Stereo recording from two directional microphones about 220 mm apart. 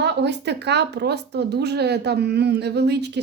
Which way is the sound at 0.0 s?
50° right (ahead or behind).